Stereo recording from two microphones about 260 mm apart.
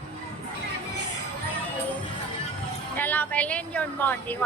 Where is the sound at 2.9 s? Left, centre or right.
Centre.